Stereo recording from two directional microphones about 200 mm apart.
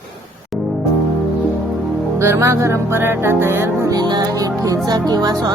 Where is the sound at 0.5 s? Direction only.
Centre (ahead or behind).